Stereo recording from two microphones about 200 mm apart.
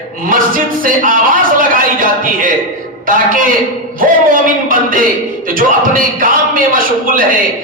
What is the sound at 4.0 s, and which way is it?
Music, 45° right (ahead or behind).